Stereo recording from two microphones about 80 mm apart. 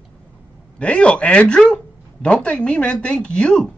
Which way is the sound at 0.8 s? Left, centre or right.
Centre.